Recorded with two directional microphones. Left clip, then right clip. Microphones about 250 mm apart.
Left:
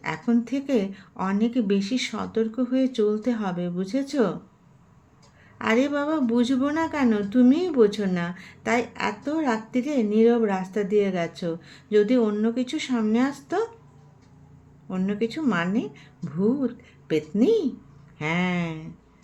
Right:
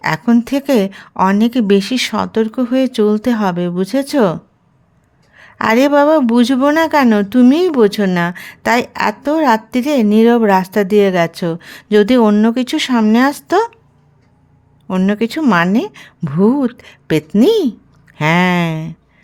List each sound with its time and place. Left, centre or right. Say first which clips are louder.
0.0 s speech: right 11 dB; right
5.4 s speech: right 11 dB; right
14.8 s speech: right 11 dB; right